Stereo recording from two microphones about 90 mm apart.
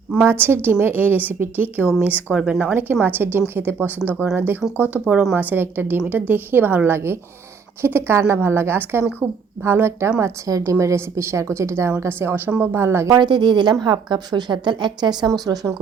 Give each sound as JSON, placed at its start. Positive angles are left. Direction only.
{"t": 0.2, "sound": "a woman's voice", "side_deg": -25}
{"t": 2.7, "sound": "a woman's voice", "side_deg": -25}
{"t": 13.1, "sound": "a woman's voice", "side_deg": -55}
{"t": 15.3, "sound": "a woman's voice", "side_deg": -35}